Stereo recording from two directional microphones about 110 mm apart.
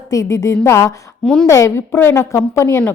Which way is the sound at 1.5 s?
25° left (ahead or behind).